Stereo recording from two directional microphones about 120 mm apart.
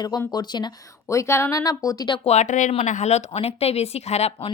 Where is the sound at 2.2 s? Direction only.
70° left (ahead or behind).